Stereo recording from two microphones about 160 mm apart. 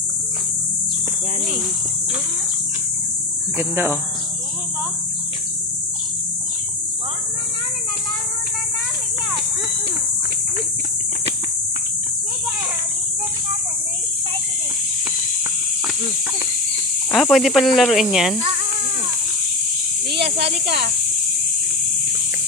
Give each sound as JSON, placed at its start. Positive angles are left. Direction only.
{"t": 3.6, "sound": "speech", "side_deg": -15}
{"t": 17.1, "sound": "speech", "side_deg": 0}
{"t": 20.1, "sound": "snake", "side_deg": -90}